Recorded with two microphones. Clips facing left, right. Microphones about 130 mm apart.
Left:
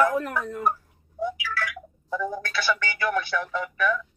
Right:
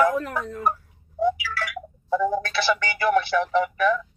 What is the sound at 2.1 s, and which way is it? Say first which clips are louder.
Speech: right 6 dB; 15° right (ahead or behind).